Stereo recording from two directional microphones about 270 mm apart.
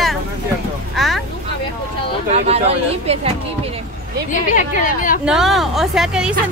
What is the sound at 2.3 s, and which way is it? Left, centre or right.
Speech, right.